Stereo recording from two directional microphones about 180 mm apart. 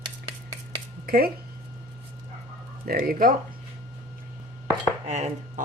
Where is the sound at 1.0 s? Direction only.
55° right (ahead or behind).